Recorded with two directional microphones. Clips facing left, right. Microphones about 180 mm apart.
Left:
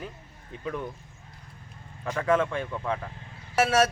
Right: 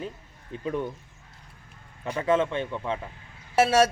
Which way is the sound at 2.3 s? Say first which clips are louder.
Right 1 dB; 25° right (ahead or behind).